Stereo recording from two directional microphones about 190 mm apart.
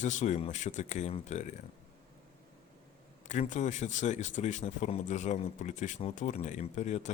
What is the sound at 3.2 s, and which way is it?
Speech, 40° left (ahead or behind).